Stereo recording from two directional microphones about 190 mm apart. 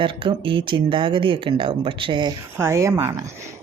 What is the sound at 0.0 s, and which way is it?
Speech, 25° right (ahead or behind).